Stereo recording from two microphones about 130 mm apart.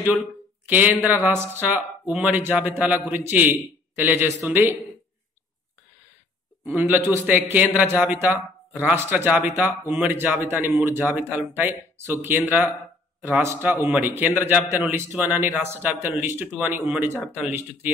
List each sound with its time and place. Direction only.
0.7 s speech: 10° right (ahead or behind)
6.6 s speech: 15° right (ahead or behind)